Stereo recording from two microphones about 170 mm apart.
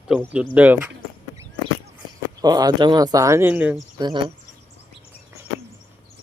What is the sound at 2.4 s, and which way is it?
Speech, 20° right (ahead or behind).